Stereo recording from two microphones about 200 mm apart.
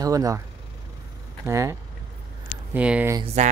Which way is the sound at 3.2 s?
35° right (ahead or behind).